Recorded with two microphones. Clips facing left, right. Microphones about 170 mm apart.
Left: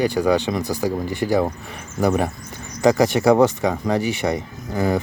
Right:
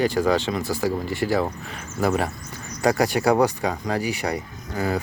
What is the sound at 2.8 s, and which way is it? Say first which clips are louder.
Speech: left 4 dB; 20° left (ahead or behind).